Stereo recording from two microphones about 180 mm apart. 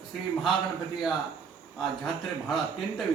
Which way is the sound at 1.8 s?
Centre (ahead or behind).